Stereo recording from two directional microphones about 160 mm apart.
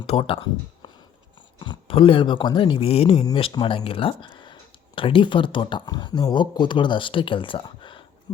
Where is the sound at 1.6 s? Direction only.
30° left (ahead or behind).